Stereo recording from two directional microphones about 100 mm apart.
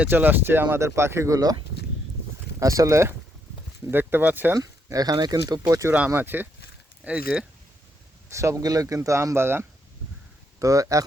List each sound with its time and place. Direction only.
0.0 s speech: 20° right (ahead or behind); by 1.5 s 35° right (ahead or behind)
2.6 s speech: 35° right (ahead or behind); by 4.5 s 20° right (ahead or behind)
4.5 s speech: 35° right (ahead or behind)
6.1 s speech: 20° right (ahead or behind)
8.3 s speech: 30° right (ahead or behind)
10.6 s speech: 35° right (ahead or behind)